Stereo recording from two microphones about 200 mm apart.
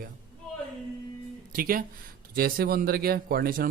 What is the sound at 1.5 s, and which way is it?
Speech, 45° right (ahead or behind).